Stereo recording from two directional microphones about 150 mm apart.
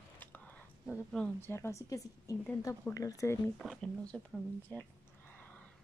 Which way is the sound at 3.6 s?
5° left (ahead or behind).